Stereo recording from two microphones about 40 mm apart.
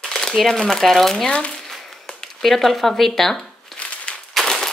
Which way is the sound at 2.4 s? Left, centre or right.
Centre.